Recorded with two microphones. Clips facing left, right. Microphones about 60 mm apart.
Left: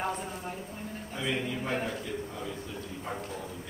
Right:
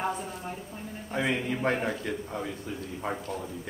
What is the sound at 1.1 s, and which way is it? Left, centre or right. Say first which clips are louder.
A man's voice: right 4 dB; right.